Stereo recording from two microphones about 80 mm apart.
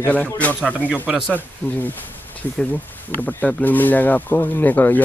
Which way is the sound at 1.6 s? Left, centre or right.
Left.